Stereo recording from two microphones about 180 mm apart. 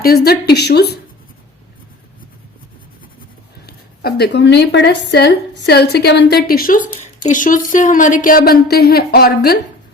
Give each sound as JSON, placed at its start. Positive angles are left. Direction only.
{"t": 0.0, "sound": "a woman's voice", "side_deg": 60}
{"t": 3.7, "sound": "a woman's voice", "side_deg": 65}